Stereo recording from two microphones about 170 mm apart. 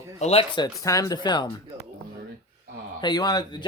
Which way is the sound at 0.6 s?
20° left (ahead or behind).